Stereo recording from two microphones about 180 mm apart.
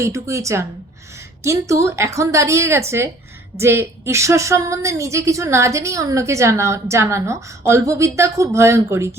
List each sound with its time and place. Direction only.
0.0 s a woman's voice: 15° right (ahead or behind)